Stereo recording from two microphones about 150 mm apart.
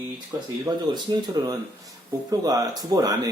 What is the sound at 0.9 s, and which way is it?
Speech, 30° right (ahead or behind).